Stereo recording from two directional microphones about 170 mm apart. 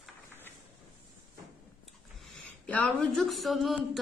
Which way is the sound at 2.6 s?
5° left (ahead or behind).